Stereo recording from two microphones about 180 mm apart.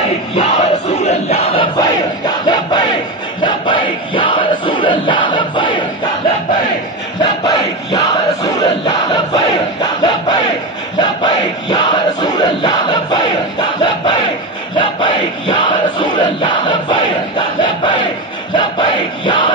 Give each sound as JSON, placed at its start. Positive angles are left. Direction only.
{"t": 0.4, "sound": "battle cry", "side_deg": 35}
{"t": 3.4, "sound": "crowd", "side_deg": 25}
{"t": 7.2, "sound": "a sound", "side_deg": 20}
{"t": 14.8, "sound": "crowd", "side_deg": 25}